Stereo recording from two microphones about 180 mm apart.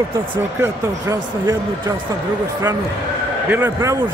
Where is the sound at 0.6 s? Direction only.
20° right (ahead or behind).